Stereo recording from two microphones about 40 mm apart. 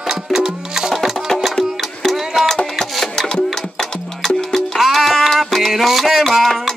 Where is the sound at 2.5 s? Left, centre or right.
Centre.